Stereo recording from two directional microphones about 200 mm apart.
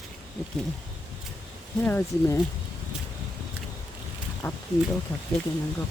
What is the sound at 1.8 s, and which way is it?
Speech, 10° left (ahead or behind).